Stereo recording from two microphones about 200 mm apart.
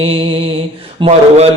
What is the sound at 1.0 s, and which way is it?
Speech, 30° right (ahead or behind).